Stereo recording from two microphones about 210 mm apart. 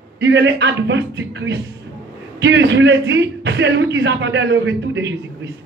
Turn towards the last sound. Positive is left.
turn(degrees=-60)  # may be behind; listen again after turning